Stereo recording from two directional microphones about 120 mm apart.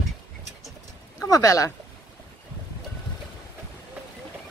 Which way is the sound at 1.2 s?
30° left (ahead or behind).